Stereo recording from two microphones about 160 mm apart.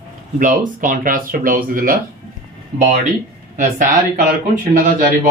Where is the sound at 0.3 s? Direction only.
55° right (ahead or behind).